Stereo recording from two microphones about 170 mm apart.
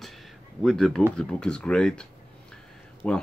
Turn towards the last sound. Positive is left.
turn(degrees=10)  # may be behind; listen again after turning